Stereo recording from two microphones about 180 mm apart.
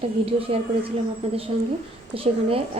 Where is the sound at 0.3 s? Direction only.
30° right (ahead or behind).